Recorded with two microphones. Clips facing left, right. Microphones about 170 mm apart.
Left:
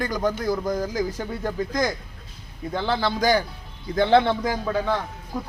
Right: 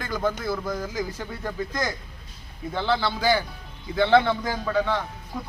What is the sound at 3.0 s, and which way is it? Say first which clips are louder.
Speech: left 5 dB; 15° left (ahead or behind).